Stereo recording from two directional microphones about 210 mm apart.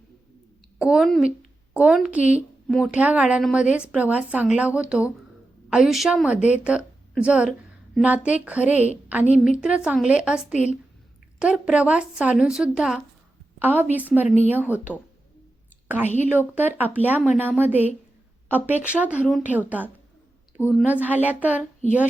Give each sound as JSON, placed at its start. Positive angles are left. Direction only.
{"t": 0.8, "sound": "a woman's voice", "side_deg": -5}
{"t": 10.5, "sound": "speech", "side_deg": 35}
{"t": 11.3, "sound": "a woman's voice", "side_deg": -5}
{"t": 14.3, "sound": "speech", "side_deg": 30}
{"t": 14.9, "sound": "speech", "side_deg": -5}
{"t": 16.0, "sound": "speech", "side_deg": 35}
{"t": 16.6, "sound": "speech", "side_deg": -10}